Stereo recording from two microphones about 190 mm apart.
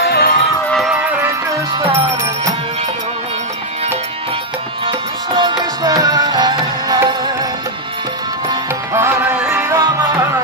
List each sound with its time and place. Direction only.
0.0 s music: 55° left (ahead or behind)
0.7 s music: centre (ahead or behind)
4.8 s music: 25° right (ahead or behind)
8.5 s music: 15° right (ahead or behind)